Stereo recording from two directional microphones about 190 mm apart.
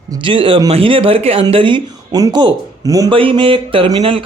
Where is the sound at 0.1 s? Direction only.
25° right (ahead or behind).